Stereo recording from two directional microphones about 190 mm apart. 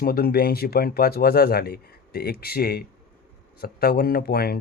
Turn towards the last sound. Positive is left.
turn(degrees=55)  # may be behind; listen again after turning